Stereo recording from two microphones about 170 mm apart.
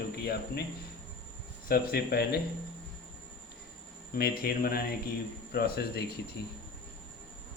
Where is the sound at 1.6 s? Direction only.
65° left (ahead or behind).